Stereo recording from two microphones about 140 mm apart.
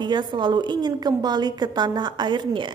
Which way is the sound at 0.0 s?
30° right (ahead or behind).